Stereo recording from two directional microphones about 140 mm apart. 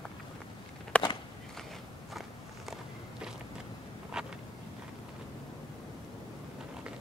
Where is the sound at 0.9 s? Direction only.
10° left (ahead or behind).